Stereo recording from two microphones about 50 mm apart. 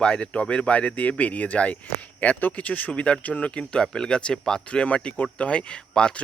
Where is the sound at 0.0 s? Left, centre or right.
Left.